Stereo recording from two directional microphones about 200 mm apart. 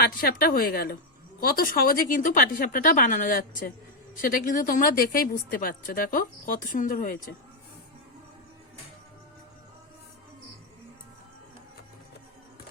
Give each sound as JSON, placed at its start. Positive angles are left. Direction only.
{"t": 0.0, "sound": "speech", "side_deg": 50}